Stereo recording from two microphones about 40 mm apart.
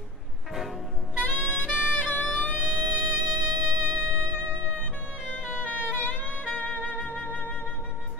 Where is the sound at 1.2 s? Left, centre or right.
Left.